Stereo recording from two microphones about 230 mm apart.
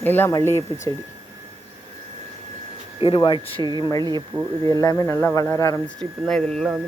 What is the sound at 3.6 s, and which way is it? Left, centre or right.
Speech, centre.